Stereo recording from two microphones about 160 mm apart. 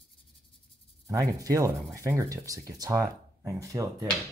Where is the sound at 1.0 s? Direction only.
20° right (ahead or behind).